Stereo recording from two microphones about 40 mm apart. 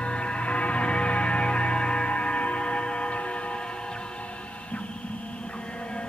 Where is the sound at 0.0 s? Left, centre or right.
Left.